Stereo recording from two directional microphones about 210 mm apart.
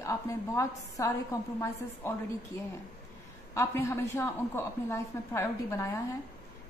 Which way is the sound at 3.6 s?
15° left (ahead or behind).